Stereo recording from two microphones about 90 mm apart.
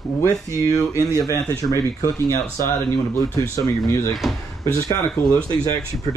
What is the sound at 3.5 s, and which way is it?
Speech, 35° left (ahead or behind).